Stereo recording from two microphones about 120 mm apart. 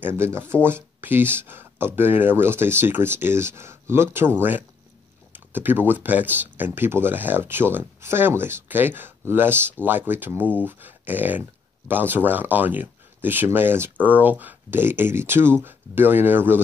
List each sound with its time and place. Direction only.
0.0 s speech: 20° right (ahead or behind)